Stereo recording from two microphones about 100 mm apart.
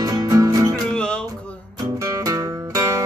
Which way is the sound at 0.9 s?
10° left (ahead or behind).